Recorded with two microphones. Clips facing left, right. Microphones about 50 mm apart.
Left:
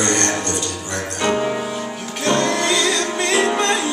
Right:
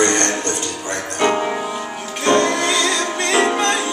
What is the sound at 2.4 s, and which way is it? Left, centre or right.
Music, centre.